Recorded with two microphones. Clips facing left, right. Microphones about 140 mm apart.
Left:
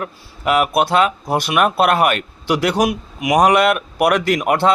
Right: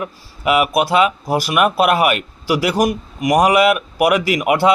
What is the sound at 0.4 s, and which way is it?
Speech, 5° right (ahead or behind).